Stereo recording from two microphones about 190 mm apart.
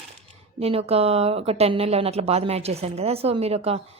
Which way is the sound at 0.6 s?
30° right (ahead or behind).